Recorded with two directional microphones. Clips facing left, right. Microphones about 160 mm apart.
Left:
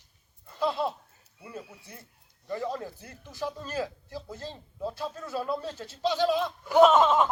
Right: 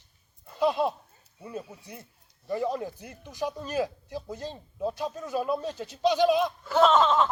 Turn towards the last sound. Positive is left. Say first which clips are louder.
# left 2 dB
turn(degrees=10)  # may be behind; listen again after turning